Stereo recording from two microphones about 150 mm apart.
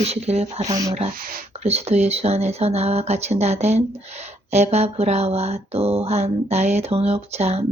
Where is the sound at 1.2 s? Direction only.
75° right (ahead or behind).